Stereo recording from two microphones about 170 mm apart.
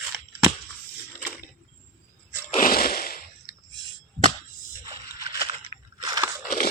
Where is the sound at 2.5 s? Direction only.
55° left (ahead or behind).